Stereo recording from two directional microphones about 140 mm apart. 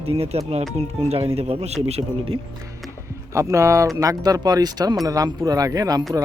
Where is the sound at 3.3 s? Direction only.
20° right (ahead or behind).